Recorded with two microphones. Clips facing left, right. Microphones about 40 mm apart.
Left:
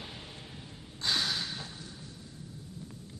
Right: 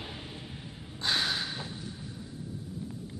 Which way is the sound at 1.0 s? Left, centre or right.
Centre.